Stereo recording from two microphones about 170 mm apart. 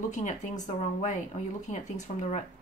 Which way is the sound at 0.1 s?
45° left (ahead or behind).